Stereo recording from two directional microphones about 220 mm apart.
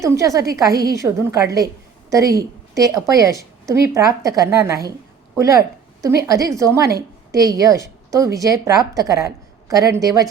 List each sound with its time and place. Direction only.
0.0 s a woman's voice: 15° right (ahead or behind)